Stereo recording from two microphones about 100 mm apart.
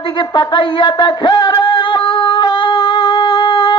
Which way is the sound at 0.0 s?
55° left (ahead or behind).